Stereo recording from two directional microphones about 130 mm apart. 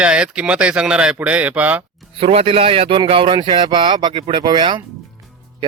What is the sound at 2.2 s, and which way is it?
Speech, 45° right (ahead or behind).